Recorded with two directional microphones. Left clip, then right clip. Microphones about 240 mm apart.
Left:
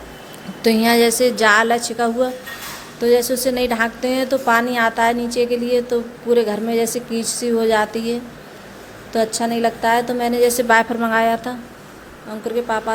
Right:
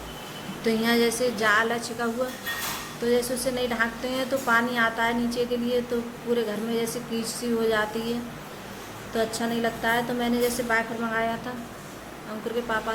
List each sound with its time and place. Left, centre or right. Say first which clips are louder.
0.6 s a woman's voice: left 9 dB; left
9.1 s a woman's voice: left 8 dB; left
12.7 s a woman's voice: left 6 dB; left